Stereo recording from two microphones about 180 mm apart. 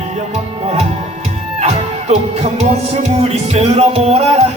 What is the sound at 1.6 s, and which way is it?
Music, 40° right (ahead or behind).